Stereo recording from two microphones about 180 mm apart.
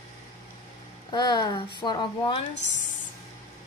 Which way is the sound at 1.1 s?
25° left (ahead or behind).